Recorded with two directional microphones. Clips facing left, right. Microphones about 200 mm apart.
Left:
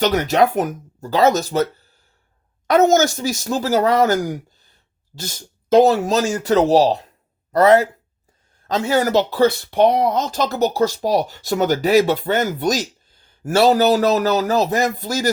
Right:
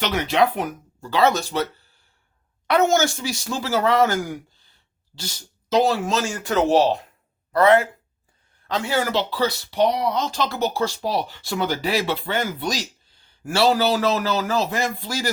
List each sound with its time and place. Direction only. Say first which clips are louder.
0.0 s speech: left 4 dB; 40° left (ahead or behind)
6.1 s speech: left 6 dB; 40° left (ahead or behind)